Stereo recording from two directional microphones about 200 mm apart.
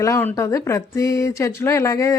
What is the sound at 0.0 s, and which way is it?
Speech, 10° left (ahead or behind).